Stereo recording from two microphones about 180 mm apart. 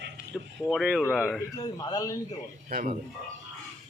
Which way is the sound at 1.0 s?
10° left (ahead or behind).